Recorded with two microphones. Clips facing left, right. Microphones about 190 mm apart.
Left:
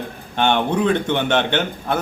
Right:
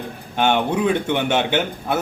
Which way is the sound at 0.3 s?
10° right (ahead or behind).